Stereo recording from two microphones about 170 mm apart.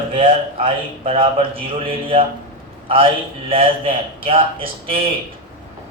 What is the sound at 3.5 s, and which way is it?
A man's voice, 30° right (ahead or behind).